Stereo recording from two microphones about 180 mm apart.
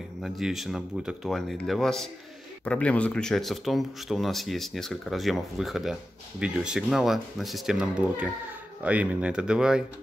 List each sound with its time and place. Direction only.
0.2 s speech: centre (ahead or behind)